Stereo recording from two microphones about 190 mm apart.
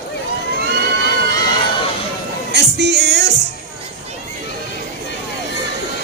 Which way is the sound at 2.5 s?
60° right (ahead or behind).